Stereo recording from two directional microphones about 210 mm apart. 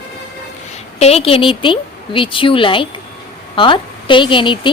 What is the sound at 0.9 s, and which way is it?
A woman's voice, 30° left (ahead or behind).